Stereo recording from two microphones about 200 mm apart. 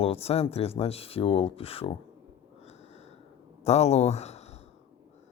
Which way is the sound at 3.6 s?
35° left (ahead or behind).